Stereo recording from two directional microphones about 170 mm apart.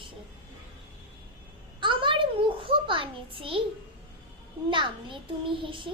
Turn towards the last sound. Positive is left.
turn(degrees=-30)  # may be behind; listen again after turning